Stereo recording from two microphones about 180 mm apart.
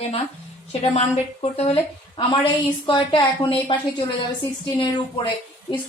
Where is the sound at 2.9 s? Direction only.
25° left (ahead or behind).